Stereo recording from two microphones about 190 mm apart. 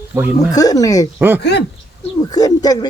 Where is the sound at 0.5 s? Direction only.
20° left (ahead or behind).